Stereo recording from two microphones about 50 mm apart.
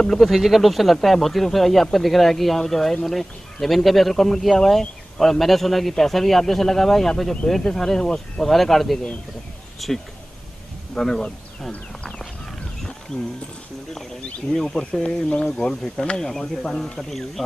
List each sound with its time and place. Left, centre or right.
0.0 s speech: centre
0.3 s speech: centre
11.0 s speech: centre
13.1 s speech: left
14.5 s speech: centre
15.0 s speech: centre